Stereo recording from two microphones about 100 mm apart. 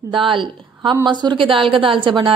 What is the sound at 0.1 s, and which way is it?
A woman's voice, 55° right (ahead or behind).